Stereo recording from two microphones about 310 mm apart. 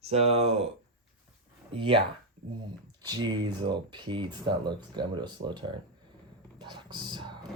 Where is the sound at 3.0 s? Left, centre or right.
Centre.